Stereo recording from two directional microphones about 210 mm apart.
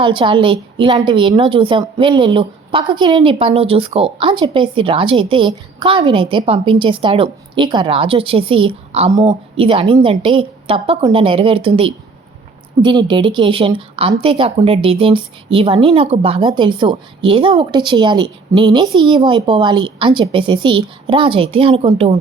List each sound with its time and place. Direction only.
0.0 s a woman's voice: 25° right (ahead or behind)